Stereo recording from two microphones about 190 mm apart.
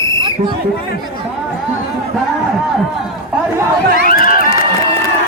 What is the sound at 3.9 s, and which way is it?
Run, 45° left (ahead or behind).